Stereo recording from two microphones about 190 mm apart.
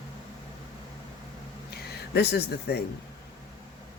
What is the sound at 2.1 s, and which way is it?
Speech, 60° left (ahead or behind).